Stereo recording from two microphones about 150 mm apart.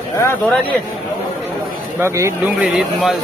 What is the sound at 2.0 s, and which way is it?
Speech, 20° right (ahead or behind).